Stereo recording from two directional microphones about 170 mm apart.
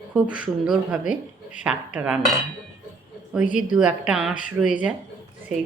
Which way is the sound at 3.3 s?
5° right (ahead or behind).